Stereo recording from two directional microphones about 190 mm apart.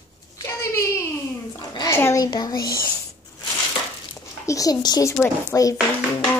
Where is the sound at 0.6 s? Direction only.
15° left (ahead or behind).